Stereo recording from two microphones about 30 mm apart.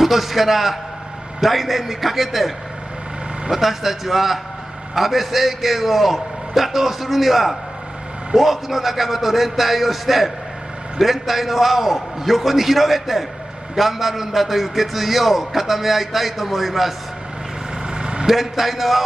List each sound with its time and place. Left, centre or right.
0.0 s a man's voice: centre
17.8 s vehicle: right
18.2 s a man's voice: centre